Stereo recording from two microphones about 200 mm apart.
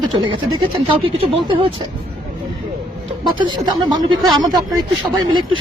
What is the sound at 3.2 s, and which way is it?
Speech, 25° right (ahead or behind).